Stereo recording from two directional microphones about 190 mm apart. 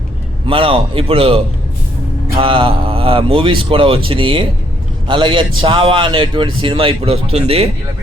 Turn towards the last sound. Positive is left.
turn(degrees=-30)  # may be behind; listen again after turning